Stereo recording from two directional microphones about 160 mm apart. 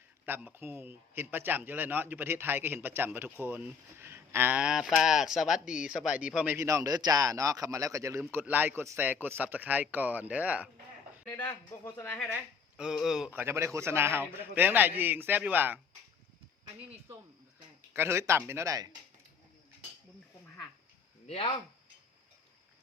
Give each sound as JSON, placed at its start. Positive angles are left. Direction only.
{"t": 0.3, "sound": "a man's voice", "side_deg": -15}
{"t": 11.3, "sound": "speech", "side_deg": 15}
{"t": 12.3, "sound": "a man's voice", "side_deg": -5}
{"t": 17.9, "sound": "a man's voice", "side_deg": -15}
{"t": 21.2, "sound": "speech", "side_deg": 40}